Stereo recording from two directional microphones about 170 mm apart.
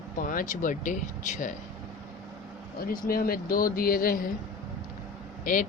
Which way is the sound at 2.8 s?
60° left (ahead or behind).